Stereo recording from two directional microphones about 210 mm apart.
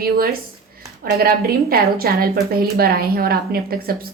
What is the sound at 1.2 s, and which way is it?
A woman's voice, 45° right (ahead or behind).